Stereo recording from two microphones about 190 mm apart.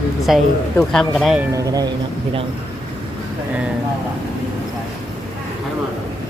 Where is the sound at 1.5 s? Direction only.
20° right (ahead or behind).